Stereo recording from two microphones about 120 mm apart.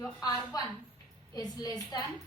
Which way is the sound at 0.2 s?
35° left (ahead or behind).